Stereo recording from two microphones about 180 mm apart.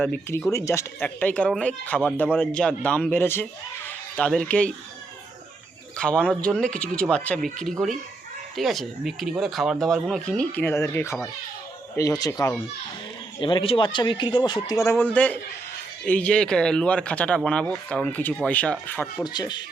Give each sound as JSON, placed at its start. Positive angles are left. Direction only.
{"t": 0.0, "sound": "speech", "side_deg": 10}
{"t": 6.0, "sound": "speech", "side_deg": 5}
{"t": 13.4, "sound": "speech", "side_deg": 30}
{"t": 19.2, "sound": "speech", "side_deg": 25}